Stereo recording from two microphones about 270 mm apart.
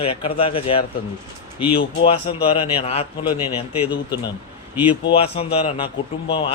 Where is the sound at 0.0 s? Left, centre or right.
Centre.